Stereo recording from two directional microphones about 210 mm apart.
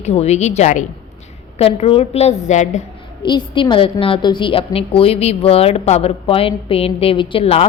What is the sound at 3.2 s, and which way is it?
A woman's voice, 20° left (ahead or behind).